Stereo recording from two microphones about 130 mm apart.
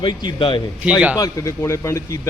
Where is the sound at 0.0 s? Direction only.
40° left (ahead or behind).